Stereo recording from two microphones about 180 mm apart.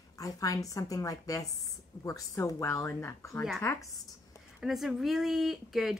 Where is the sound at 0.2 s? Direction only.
20° left (ahead or behind).